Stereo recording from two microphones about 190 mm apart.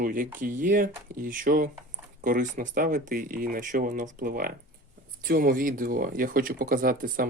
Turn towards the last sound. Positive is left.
turn(degrees=-45)  # may be behind; listen again after turning